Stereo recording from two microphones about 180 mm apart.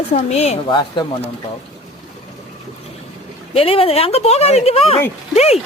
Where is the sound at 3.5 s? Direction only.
30° left (ahead or behind).